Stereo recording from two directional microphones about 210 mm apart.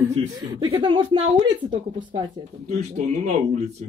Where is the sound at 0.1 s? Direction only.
25° right (ahead or behind).